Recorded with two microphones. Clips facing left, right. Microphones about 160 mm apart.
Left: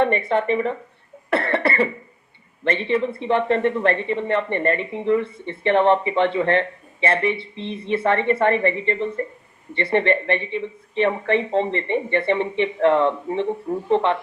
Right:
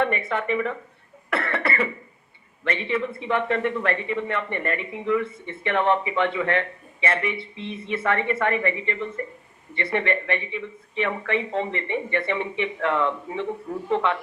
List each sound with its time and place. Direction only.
0.3 s speech: 30° left (ahead or behind)
1.3 s cough: 30° left (ahead or behind)
2.6 s speech: 30° left (ahead or behind)